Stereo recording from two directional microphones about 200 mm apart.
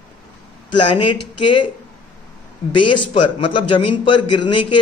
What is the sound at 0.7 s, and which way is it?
Speech, 25° left (ahead or behind).